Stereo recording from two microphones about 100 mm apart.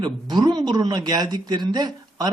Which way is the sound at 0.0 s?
45° right (ahead or behind).